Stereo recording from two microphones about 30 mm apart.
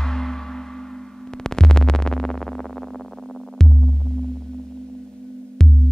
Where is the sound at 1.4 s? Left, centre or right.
Left.